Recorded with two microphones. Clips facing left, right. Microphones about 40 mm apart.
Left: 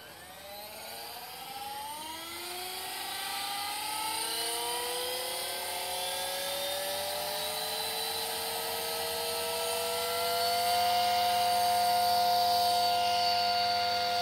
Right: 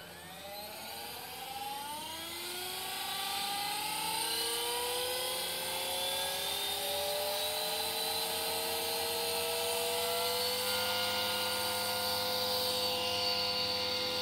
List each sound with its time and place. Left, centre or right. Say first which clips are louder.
4.1 s vehicle: left 1 dB; right
7.8 s vacuum cleaner: left 1 dB; left
8.1 s vehicle: even; right; by 14.2 s centre